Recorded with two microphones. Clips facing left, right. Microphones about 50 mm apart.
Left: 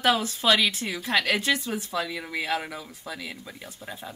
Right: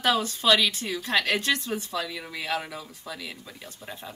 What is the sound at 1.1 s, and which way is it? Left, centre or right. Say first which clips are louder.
Speech: left 1 dB; centre.